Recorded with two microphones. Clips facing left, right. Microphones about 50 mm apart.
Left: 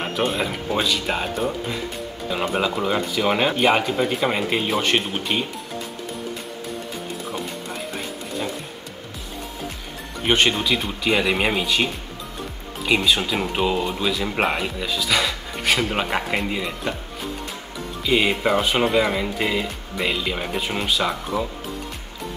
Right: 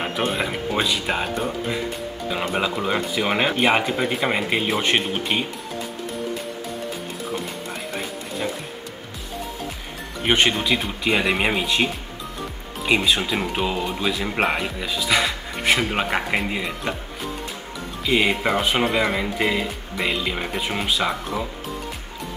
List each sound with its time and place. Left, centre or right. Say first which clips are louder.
0.0 s speech: left 1 dB; centre
10.2 s speech: even; centre
13.5 s speech: left 2 dB; centre
14.0 s speech: right 1 dB; centre
15.9 s speech: right 1 dB; centre
18.0 s speech: even; centre